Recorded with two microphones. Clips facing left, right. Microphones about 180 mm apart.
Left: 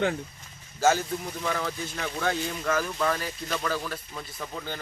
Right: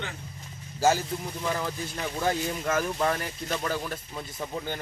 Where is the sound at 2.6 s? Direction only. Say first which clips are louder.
Even; 25° right (ahead or behind).